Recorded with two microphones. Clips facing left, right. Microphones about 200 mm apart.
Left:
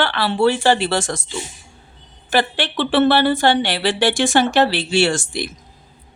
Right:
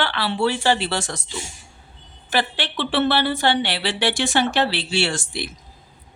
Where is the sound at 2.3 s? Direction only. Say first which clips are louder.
Left 4 dB; 50° left (ahead or behind).